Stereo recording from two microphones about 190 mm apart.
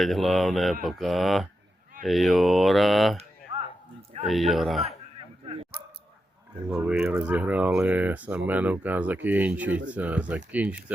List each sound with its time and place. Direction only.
0.0 s mantra: centre (ahead or behind)
3.5 s whip: 30° right (ahead or behind)
4.2 s mantra: centre (ahead or behind)
6.7 s speech: 5° right (ahead or behind)